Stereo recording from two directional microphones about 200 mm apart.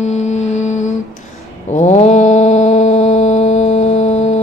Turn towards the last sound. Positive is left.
turn(degrees=35)  # may be behind; listen again after turning